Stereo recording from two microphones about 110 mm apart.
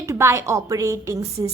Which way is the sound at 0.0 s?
25° right (ahead or behind).